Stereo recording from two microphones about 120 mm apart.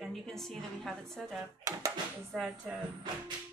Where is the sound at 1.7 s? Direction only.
25° right (ahead or behind).